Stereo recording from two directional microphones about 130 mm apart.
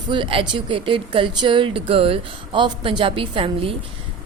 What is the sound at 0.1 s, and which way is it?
A woman's voice, 40° right (ahead or behind).